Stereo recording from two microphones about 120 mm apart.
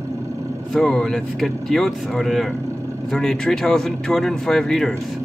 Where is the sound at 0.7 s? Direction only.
5° left (ahead or behind).